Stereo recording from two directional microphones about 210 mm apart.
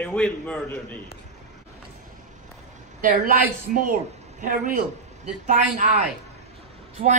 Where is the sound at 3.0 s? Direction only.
40° right (ahead or behind).